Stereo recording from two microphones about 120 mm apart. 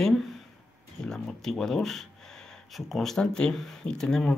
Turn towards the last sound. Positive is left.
turn(degrees=5)  # may be behind; listen again after turning